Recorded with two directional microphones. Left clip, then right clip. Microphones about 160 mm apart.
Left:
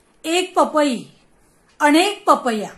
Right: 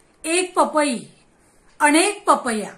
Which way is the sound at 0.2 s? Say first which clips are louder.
Left 2 dB; 65° left (ahead or behind).